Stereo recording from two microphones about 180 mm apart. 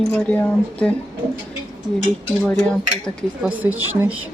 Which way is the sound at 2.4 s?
5° left (ahead or behind).